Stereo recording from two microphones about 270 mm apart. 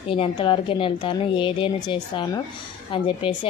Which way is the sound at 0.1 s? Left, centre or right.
Centre.